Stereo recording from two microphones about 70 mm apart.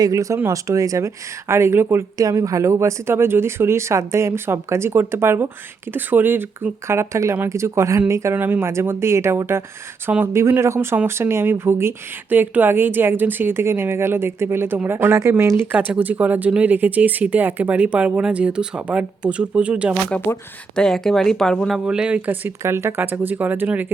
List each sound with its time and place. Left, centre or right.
0.0 s speech: right
2.1 s speech: right
5.9 s speech: right
8.4 s speech: right
8.7 s speech: right
16.0 s speech: right
20.1 s speech: centre
21.8 s speech: centre
22.6 s speech: right